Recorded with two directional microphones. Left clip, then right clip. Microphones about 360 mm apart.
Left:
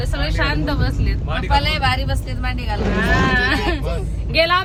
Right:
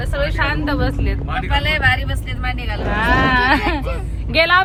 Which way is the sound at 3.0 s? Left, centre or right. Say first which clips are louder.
Right 3 dB; centre.